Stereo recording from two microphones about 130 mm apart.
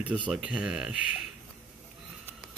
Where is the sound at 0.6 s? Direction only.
5° right (ahead or behind).